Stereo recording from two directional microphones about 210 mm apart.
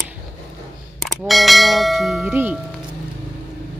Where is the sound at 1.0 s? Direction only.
Centre (ahead or behind).